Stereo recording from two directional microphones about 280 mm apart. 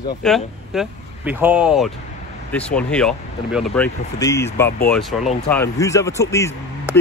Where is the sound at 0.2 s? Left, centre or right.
Centre.